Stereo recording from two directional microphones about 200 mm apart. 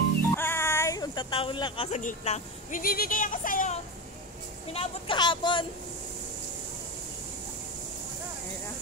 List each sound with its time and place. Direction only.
0.4 s a sound: 10° left (ahead or behind)
2.0 s speech: 35° left (ahead or behind)
2.8 s speech: 50° left (ahead or behind)
4.7 s speech: 25° left (ahead or behind)